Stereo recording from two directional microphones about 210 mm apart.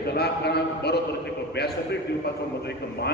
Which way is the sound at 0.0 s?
50° left (ahead or behind).